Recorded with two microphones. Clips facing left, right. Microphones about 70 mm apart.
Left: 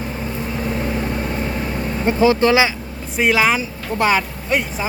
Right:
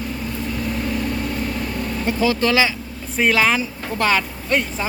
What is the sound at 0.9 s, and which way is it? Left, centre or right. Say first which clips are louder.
Vehicle: left 1 dB; left.